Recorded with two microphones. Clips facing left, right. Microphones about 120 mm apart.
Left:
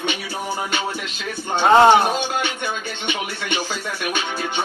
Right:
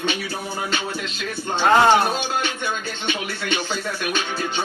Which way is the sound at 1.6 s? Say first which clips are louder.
Left 3 dB; 20° left (ahead or behind).